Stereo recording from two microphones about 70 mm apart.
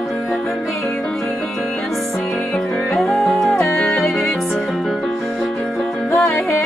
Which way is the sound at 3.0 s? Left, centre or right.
Centre.